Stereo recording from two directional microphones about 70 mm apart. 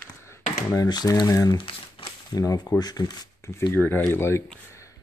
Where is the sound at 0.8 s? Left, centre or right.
Left.